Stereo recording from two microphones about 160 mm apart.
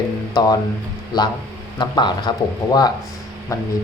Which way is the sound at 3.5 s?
20° left (ahead or behind).